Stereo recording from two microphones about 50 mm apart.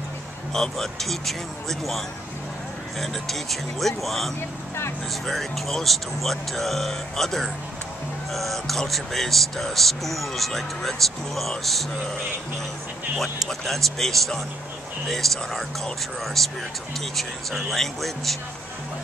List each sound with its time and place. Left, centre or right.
0.5 s speech: centre
4.4 s vehicle: left
5.2 s speech: centre
13.2 s speech: centre